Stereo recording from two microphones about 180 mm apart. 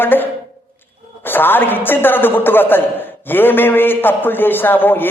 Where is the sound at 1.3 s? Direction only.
10° left (ahead or behind).